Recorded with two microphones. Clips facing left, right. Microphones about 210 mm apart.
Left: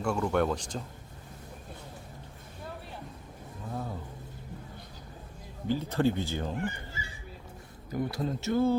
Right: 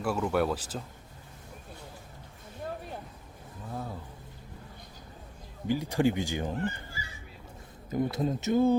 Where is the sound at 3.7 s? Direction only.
Centre (ahead or behind).